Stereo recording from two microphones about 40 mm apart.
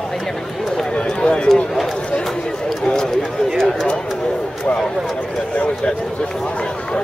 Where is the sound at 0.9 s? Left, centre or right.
Left.